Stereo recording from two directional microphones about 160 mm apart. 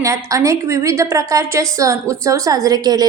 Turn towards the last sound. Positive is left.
turn(degrees=-25)  # may be behind; listen again after turning